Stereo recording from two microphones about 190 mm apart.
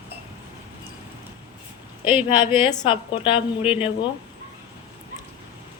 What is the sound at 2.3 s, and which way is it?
A woman's voice, 25° left (ahead or behind).